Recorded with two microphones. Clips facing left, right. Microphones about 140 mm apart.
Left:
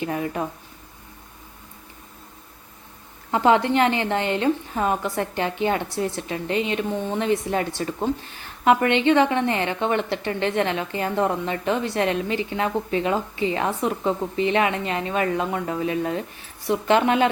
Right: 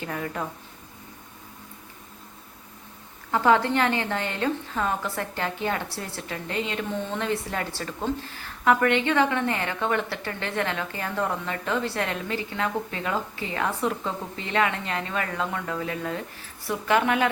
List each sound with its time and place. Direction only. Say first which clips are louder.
0.0 s a woman's voice: left 5 dB; 20° left (ahead or behind)
3.3 s a woman's voice: left 3 dB; 20° left (ahead or behind)